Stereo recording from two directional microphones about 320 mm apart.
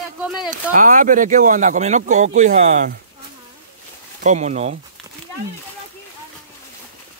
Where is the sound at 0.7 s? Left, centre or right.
Right.